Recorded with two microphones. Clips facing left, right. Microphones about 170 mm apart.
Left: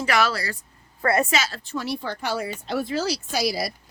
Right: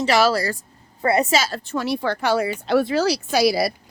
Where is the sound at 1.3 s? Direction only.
40° right (ahead or behind).